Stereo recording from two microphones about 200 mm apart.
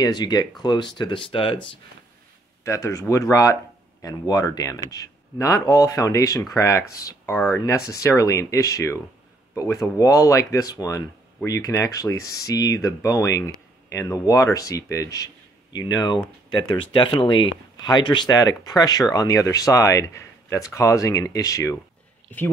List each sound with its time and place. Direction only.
0.0 s speech: 20° left (ahead or behind)
2.6 s speech: 15° left (ahead or behind)